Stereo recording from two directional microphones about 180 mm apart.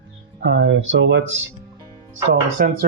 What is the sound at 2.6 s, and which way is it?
Speech, 55° right (ahead or behind).